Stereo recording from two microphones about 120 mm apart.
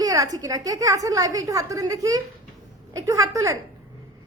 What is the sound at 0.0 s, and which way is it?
Speech, 30° right (ahead or behind).